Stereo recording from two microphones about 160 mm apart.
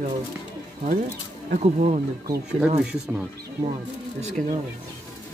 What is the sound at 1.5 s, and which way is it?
Speech, 45° right (ahead or behind).